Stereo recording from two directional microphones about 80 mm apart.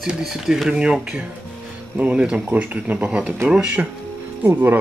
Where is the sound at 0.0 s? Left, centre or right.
Centre.